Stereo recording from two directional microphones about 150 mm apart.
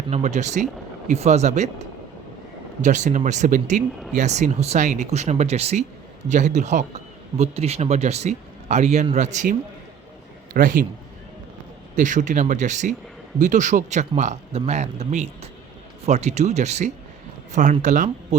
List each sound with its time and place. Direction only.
0.1 s speech: 50° right (ahead or behind)
2.8 s speech: 55° right (ahead or behind)
10.5 s speech: 65° right (ahead or behind)
11.9 s speech: 55° right (ahead or behind)